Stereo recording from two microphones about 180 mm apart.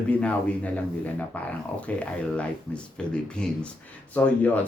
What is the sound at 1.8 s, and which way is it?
Speech, 5° left (ahead or behind).